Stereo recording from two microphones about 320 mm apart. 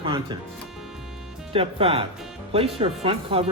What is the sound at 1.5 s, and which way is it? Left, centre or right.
Speech, centre.